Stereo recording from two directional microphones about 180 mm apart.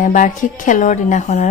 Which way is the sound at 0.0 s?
45° left (ahead or behind).